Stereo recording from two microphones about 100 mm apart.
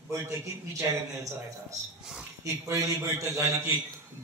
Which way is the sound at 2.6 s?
30° right (ahead or behind).